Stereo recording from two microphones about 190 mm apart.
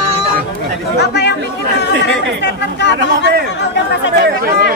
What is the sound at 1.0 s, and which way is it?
Speech, 60° left (ahead or behind).